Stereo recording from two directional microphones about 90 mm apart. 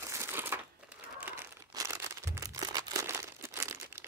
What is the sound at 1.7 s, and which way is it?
Crumpling, 35° right (ahead or behind).